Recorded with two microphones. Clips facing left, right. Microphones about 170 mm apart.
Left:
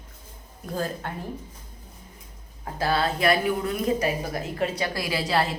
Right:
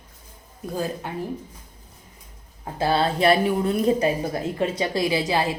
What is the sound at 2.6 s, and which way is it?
A woman's voice, 25° right (ahead or behind).